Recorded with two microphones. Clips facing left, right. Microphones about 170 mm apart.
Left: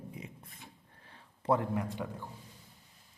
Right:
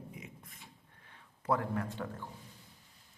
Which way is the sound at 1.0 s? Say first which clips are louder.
Left 4 dB; 30° left (ahead or behind).